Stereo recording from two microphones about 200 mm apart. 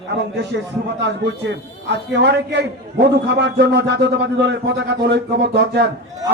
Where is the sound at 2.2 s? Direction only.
60° right (ahead or behind).